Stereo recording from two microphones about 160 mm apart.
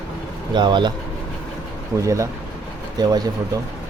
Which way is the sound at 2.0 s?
20° right (ahead or behind).